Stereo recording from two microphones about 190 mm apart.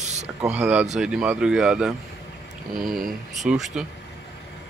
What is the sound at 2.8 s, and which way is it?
Speech, 45° right (ahead or behind).